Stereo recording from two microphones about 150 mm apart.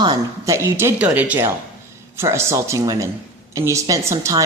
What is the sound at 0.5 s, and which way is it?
A woman's voice, 15° right (ahead or behind).